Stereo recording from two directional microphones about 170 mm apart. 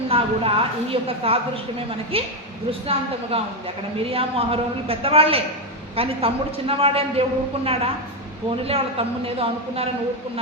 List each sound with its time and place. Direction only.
0.1 s a woman's voice: 35° right (ahead or behind)
3.3 s a woman's voice: 35° right (ahead or behind)